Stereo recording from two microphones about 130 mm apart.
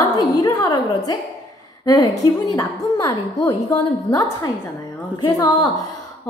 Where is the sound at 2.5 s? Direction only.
30° left (ahead or behind).